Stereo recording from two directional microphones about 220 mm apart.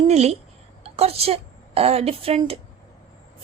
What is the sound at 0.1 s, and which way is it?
A woman's voice, 30° right (ahead or behind).